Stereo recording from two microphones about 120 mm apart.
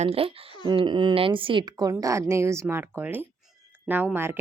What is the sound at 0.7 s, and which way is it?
A woman's voice, 40° right (ahead or behind).